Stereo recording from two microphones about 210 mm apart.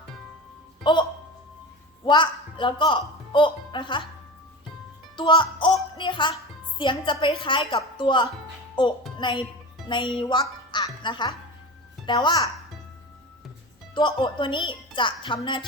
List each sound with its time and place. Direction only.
0.9 s a woman's voice: 20° left (ahead or behind)
2.0 s speech: 20° left (ahead or behind)
5.1 s a woman's voice: 25° left (ahead or behind)
13.9 s a woman's voice: 20° left (ahead or behind)